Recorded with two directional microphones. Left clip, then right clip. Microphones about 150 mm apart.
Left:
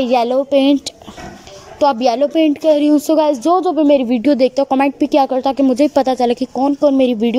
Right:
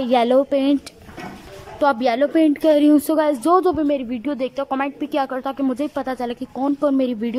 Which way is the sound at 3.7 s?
20° left (ahead or behind).